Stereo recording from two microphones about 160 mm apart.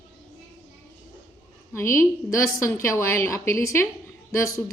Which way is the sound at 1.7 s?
15° left (ahead or behind).